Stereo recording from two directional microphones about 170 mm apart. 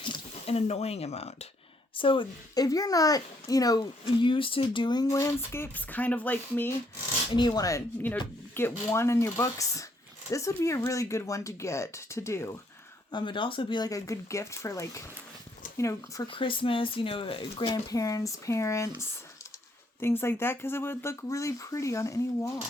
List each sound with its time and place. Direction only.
0.0 s a child's voice: 35° left (ahead or behind); by 6.7 s 10° left (ahead or behind)
7.3 s a child's voice: 25° left (ahead or behind)
13.1 s a child's voice: 25° left (ahead or behind)
16.3 s a child's voice: 30° left (ahead or behind)